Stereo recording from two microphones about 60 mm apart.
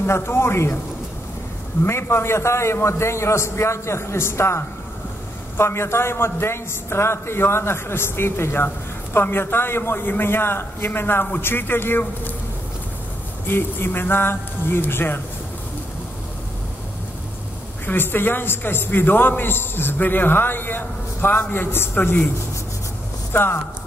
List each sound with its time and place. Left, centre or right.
0.0 s a man's voice: left
1.9 s a man's voice: left
13.5 s a man's voice: left
17.8 s a man's voice: left
23.3 s a man's voice: left